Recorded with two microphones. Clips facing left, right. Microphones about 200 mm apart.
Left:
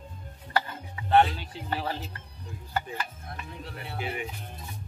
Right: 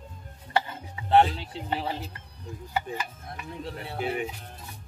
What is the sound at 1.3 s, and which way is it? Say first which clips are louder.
Speech: right 2 dB; 20° right (ahead or behind).